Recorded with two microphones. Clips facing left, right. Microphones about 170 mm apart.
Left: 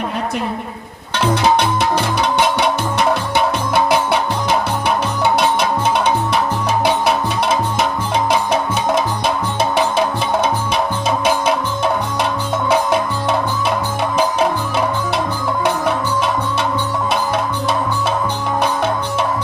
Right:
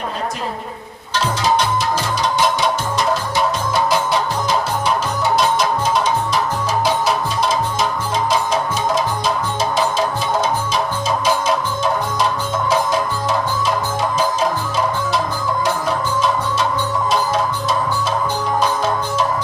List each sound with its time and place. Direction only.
1.1 s music: 65° left (ahead or behind)
11.2 s music: 60° left (ahead or behind)